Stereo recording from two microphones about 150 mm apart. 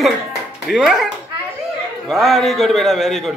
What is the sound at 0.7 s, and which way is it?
Speech, centre (ahead or behind).